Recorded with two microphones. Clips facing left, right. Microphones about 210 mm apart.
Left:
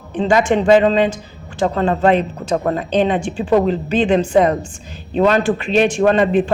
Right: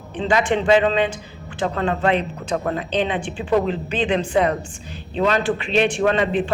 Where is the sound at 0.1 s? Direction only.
45° left (ahead or behind).